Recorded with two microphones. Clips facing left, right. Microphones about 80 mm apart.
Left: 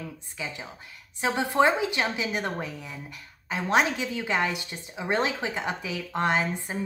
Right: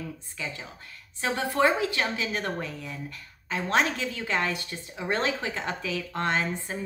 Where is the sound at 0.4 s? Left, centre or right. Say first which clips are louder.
Left 1 dB; centre.